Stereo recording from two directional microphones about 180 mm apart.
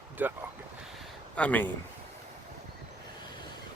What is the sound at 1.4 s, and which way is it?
Speech, 10° left (ahead or behind).